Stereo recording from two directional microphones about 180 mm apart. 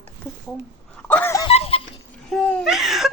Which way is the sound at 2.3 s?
Centre (ahead or behind).